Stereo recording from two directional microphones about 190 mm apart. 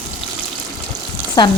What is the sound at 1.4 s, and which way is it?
Speech, 20° left (ahead or behind).